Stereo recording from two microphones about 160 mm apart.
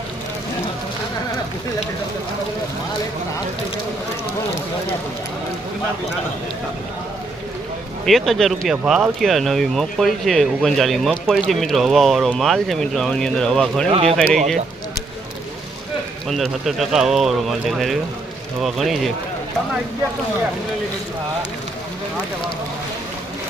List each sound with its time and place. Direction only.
8.0 s speech: centre (ahead or behind)
13.8 s speech: 40° right (ahead or behind)
14.3 s speech: centre (ahead or behind)
16.3 s speech: centre (ahead or behind)